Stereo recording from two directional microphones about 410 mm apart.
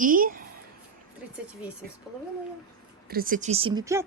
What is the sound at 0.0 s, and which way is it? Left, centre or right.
Speech, centre.